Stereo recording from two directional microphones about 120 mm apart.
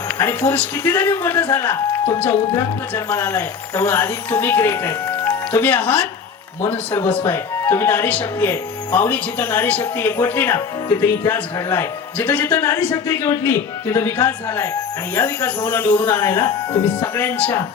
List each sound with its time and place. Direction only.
0.2 s a man's voice: 20° left (ahead or behind)
2.9 s a man's voice: 15° left (ahead or behind)